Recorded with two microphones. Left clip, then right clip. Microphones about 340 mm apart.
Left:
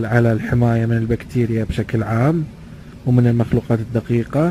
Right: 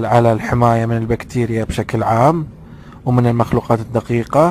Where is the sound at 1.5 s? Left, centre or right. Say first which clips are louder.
Right 3 dB; centre.